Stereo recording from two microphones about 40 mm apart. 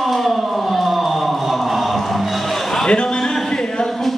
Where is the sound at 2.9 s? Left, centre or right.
Left.